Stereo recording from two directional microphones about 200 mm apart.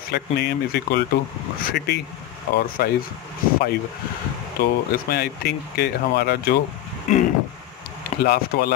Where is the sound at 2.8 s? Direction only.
50° left (ahead or behind).